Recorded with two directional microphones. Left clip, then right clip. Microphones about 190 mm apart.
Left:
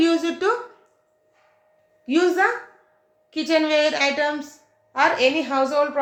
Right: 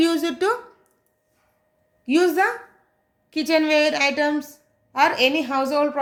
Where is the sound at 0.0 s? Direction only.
55° right (ahead or behind).